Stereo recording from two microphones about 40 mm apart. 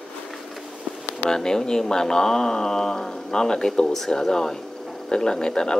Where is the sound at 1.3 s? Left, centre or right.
Centre.